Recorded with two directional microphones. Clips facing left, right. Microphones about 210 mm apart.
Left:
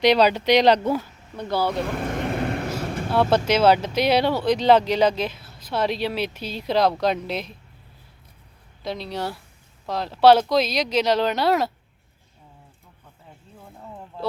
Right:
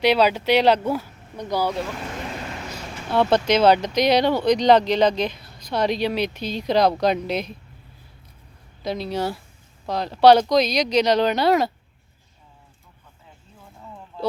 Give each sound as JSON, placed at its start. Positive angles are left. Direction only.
{"t": 0.0, "sound": "speech", "side_deg": -5}
{"t": 2.0, "sound": "vehicle", "side_deg": 55}
{"t": 3.1, "sound": "speech", "side_deg": 10}
{"t": 8.8, "sound": "speech", "side_deg": 0}